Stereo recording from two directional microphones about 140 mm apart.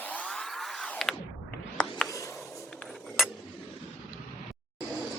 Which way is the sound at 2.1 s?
25° left (ahead or behind).